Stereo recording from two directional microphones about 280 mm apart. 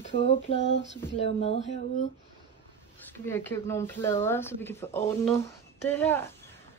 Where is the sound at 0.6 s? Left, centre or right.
Left.